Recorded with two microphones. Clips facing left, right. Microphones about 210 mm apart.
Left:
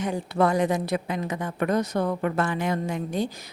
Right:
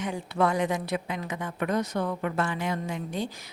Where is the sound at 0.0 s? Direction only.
40° left (ahead or behind).